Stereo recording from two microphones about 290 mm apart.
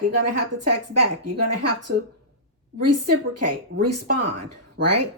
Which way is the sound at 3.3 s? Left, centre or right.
Right.